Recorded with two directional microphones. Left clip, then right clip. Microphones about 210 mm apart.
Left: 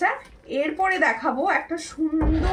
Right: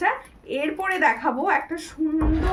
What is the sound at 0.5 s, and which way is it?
A woman's voice, 10° right (ahead or behind).